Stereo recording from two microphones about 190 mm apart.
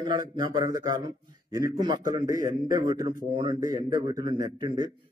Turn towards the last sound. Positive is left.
turn(degrees=-20)  # may be behind; listen again after turning